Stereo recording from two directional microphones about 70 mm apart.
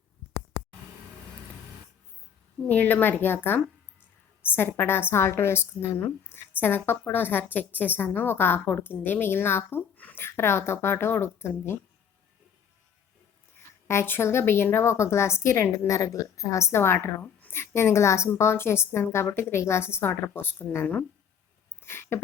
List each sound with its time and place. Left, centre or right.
2.6 s a woman's voice: left
13.8 s a woman's voice: left
15.9 s a woman's voice: left
21.8 s a sound: left